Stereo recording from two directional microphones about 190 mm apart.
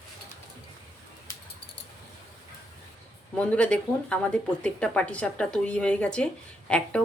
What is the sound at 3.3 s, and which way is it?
Speech, 5° left (ahead or behind).